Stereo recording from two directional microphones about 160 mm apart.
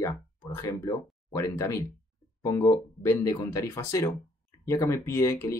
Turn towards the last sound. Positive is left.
turn(degrees=20)  # may be behind; listen again after turning